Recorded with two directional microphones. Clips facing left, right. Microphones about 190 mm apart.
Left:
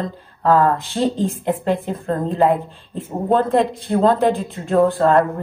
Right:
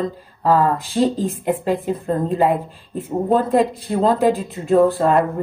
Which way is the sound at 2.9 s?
5° right (ahead or behind).